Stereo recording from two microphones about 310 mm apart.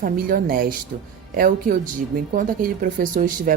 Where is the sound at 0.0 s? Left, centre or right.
Right.